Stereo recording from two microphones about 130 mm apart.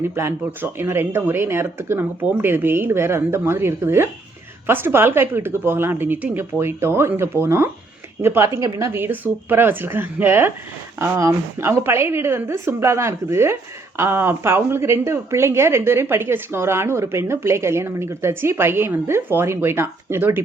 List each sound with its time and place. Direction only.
0.0 s a woman's voice: 20° right (ahead or behind)